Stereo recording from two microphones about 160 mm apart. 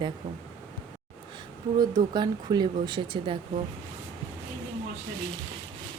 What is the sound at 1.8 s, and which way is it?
A woman's voice, 25° right (ahead or behind).